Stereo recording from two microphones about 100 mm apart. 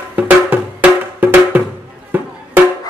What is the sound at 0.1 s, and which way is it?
Music, 15° right (ahead or behind).